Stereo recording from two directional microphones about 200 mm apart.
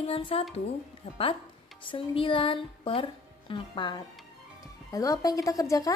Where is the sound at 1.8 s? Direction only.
25° left (ahead or behind).